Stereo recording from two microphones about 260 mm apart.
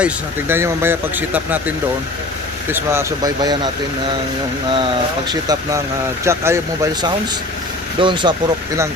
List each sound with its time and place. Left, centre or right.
0.0 s speech: centre
5.3 s speech: centre